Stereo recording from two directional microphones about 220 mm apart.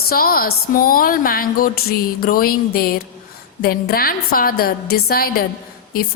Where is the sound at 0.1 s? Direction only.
40° left (ahead or behind).